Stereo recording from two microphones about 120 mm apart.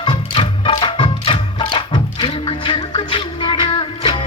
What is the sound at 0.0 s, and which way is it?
Music, 40° left (ahead or behind).